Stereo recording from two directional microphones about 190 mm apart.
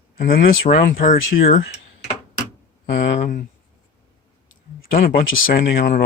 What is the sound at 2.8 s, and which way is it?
Speech, 40° left (ahead or behind).